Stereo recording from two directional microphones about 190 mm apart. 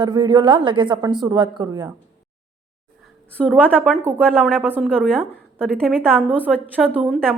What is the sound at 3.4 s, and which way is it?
Speech, 5° left (ahead or behind).